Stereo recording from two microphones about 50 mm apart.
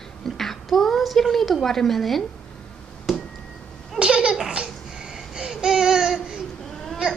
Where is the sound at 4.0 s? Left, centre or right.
Right.